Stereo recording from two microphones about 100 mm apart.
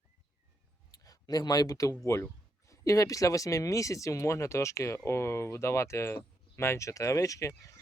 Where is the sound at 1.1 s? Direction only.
40° left (ahead or behind).